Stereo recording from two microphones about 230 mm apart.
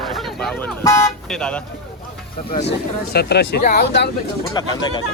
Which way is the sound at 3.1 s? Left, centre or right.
Left.